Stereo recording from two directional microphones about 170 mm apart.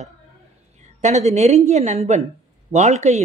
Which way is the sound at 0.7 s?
40° right (ahead or behind).